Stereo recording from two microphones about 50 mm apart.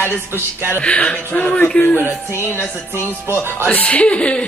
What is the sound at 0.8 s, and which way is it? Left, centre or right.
A woman's voice, left.